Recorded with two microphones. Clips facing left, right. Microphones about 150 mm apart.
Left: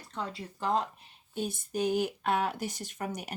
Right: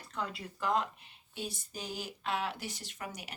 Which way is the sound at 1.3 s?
50° left (ahead or behind).